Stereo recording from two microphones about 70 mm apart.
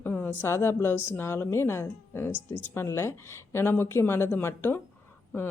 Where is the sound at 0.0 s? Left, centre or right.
Left.